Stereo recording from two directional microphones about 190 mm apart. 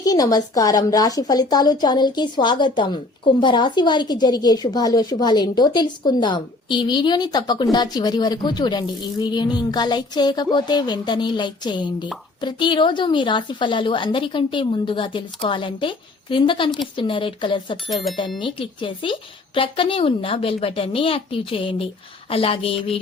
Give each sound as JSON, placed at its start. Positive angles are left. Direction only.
{"t": 0.0, "sound": "a woman's voice", "side_deg": 20}